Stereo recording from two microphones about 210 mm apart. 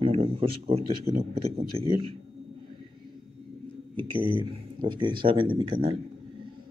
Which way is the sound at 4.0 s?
25° right (ahead or behind).